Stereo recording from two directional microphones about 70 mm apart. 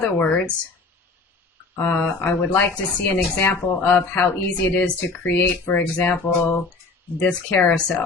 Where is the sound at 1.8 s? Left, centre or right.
Left.